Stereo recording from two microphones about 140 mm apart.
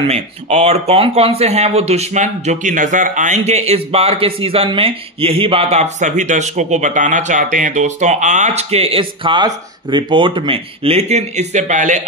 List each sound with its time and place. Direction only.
0.1 s speech: 50° right (ahead or behind)